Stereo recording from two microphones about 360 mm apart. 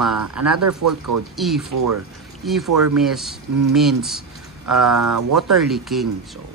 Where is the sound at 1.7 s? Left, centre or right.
Right.